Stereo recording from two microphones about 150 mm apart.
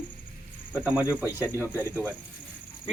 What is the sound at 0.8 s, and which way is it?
Speech, 10° right (ahead or behind).